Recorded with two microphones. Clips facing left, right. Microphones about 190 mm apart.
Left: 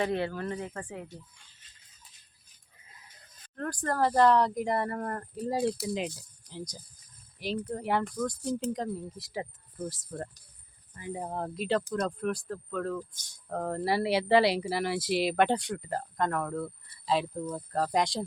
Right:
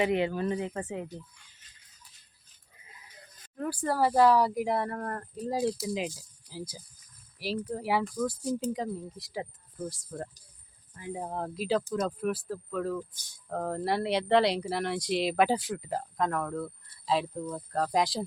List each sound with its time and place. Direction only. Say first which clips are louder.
0.0 s speech: right 3 dB; 15° right (ahead or behind)
3.5 s speech: right 2 dB; 5° right (ahead or behind)